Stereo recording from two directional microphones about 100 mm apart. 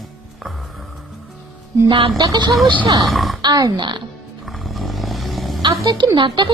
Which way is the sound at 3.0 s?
Centre (ahead or behind).